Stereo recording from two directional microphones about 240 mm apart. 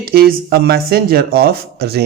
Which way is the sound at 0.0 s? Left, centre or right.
Right.